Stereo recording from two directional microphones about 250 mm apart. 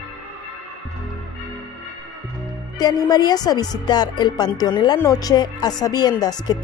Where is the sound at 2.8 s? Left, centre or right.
Centre.